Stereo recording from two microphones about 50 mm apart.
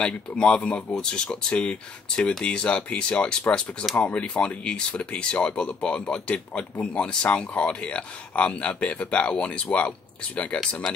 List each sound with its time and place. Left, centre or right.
0.0 s speech: centre